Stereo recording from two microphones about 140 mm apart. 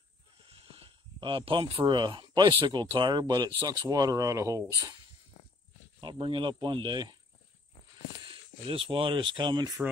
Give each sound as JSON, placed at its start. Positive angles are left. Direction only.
{"t": 0.5, "sound": "speech", "side_deg": -40}
{"t": 5.9, "sound": "speech", "side_deg": -35}
{"t": 8.2, "sound": "speech", "side_deg": -40}